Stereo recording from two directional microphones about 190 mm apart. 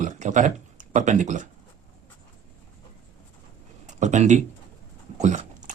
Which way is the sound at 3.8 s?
40° right (ahead or behind).